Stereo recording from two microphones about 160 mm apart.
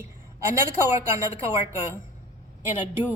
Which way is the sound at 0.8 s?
15° right (ahead or behind).